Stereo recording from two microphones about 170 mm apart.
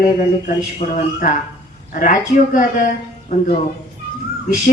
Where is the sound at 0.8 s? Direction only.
45° left (ahead or behind).